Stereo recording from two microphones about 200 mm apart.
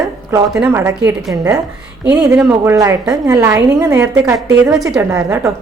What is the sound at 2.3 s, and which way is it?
A woman's voice, 10° right (ahead or behind).